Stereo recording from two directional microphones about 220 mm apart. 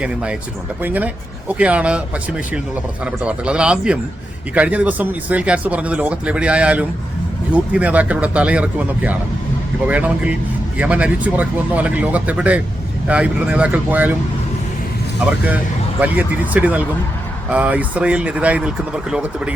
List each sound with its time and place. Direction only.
0.0 s speech: 5° right (ahead or behind)
3.0 s speech: 5° right (ahead or behind)
15.3 s speech: 5° right (ahead or behind)